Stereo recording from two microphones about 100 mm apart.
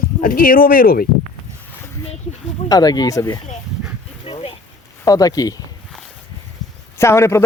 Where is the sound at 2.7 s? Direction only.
40° left (ahead or behind).